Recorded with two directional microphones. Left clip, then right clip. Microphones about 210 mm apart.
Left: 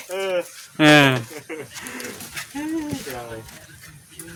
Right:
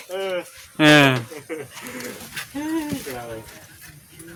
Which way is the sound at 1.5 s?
20° left (ahead or behind).